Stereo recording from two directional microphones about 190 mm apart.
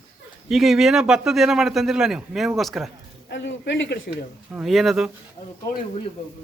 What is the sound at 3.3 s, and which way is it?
Speech, 70° left (ahead or behind).